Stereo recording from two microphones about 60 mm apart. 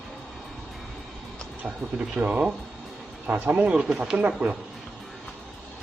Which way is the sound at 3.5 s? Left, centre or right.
Centre.